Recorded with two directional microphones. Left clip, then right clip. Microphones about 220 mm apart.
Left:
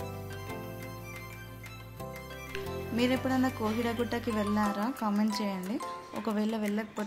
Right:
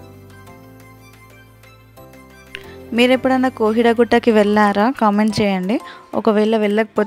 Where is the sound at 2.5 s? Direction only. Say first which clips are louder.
Right 14 dB; 40° right (ahead or behind).